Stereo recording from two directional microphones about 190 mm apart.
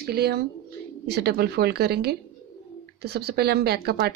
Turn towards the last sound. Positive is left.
turn(degrees=-55)  # may be behind; listen again after turning